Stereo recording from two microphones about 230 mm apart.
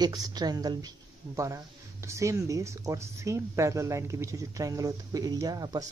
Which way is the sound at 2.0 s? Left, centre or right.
Centre.